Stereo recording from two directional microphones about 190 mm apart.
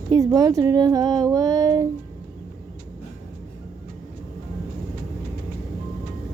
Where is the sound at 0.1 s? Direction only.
20° right (ahead or behind).